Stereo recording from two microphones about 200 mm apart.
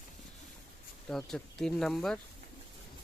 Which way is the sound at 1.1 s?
5° left (ahead or behind).